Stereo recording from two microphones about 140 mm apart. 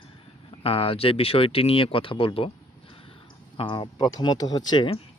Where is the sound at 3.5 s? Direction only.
40° left (ahead or behind).